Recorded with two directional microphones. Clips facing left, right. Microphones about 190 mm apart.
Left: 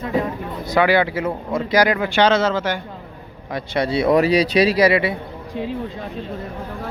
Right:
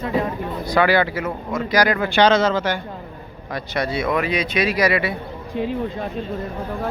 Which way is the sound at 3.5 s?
25° left (ahead or behind).